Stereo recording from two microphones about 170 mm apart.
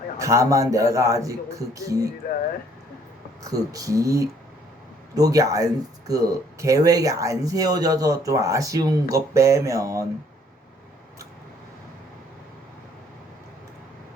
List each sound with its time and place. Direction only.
0.2 s speech: 20° right (ahead or behind)
3.4 s speech: 20° right (ahead or behind)